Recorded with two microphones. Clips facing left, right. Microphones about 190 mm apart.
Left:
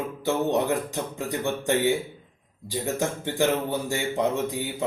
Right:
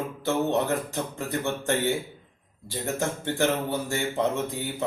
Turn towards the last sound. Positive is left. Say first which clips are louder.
# left 1 dB
turn(degrees=15)  # may be behind; listen again after turning